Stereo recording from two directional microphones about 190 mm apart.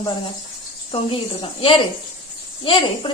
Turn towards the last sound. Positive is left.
turn(degrees=25)  # may be behind; listen again after turning